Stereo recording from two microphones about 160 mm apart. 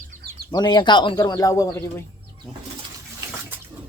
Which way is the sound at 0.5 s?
25° left (ahead or behind).